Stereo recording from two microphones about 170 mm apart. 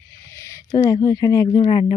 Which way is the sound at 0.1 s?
15° left (ahead or behind).